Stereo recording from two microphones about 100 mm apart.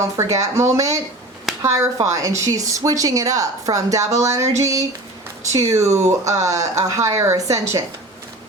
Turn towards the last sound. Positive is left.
turn(degrees=-30)  # may be behind; listen again after turning